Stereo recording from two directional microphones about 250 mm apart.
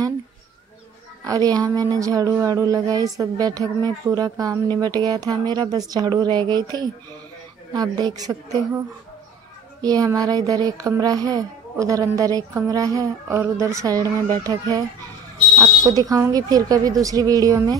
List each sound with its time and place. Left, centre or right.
1.2 s speech: centre
9.8 s speech: centre